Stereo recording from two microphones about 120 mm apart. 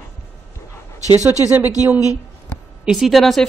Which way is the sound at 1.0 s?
30° left (ahead or behind).